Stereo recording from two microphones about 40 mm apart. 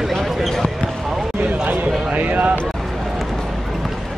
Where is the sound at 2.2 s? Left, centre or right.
Right.